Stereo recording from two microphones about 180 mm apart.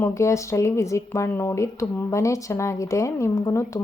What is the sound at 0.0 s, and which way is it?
Speech, 15° left (ahead or behind).